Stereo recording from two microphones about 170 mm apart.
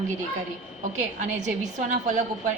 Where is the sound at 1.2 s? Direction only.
45° right (ahead or behind).